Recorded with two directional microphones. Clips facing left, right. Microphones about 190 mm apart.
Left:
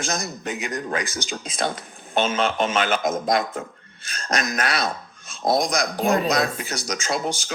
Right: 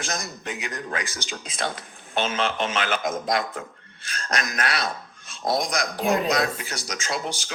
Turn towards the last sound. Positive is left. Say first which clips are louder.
# left 4 dB
turn(degrees=45)  # may be behind; listen again after turning